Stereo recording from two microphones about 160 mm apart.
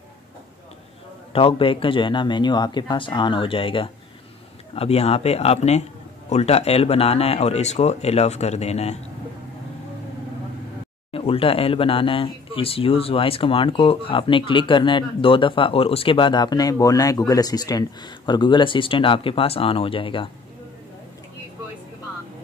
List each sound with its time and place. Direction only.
1.3 s speech: 35° left (ahead or behind)
11.1 s speech: 35° left (ahead or behind)